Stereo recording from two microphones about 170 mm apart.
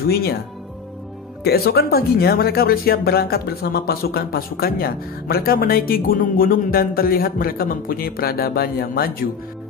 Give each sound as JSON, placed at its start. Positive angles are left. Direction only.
{"t": 0.1, "sound": "speech", "side_deg": 65}
{"t": 1.4, "sound": "speech", "side_deg": 65}